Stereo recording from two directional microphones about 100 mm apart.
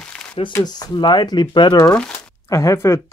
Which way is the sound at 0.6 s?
50° left (ahead or behind).